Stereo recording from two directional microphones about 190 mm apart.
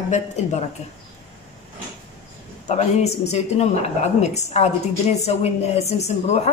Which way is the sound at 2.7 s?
35° left (ahead or behind).